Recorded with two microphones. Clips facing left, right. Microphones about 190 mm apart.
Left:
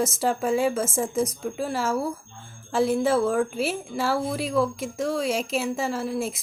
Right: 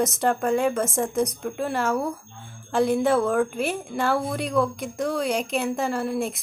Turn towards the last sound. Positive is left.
turn(degrees=0)  # may be behind; listen again after turning